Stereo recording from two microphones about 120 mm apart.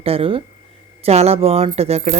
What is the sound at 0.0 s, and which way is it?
Speech, 50° right (ahead or behind).